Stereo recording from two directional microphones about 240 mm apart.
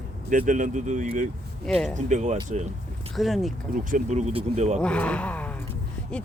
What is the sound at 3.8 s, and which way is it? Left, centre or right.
Speech, right.